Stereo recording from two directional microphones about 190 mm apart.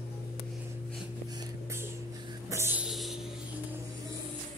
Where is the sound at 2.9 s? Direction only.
Centre (ahead or behind).